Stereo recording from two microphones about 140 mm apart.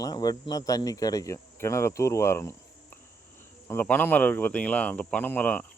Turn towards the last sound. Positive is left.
turn(degrees=10)  # may be behind; listen again after turning